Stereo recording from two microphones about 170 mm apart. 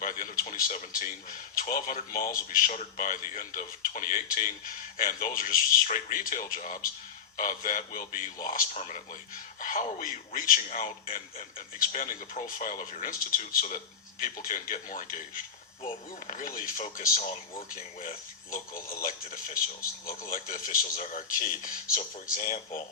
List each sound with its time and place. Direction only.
0.0 s a man's voice: 55° left (ahead or behind)
16.2 s a man's voice: 55° left (ahead or behind)